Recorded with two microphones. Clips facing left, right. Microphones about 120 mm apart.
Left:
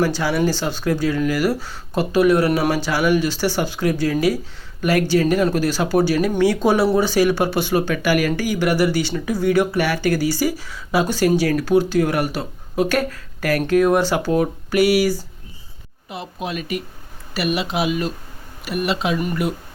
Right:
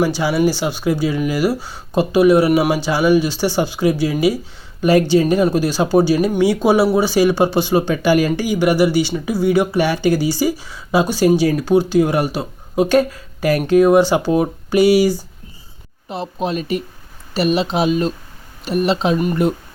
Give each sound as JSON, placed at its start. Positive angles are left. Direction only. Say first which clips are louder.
{"t": 0.0, "sound": "speech", "louder": "right 3 dB", "side_deg": -15}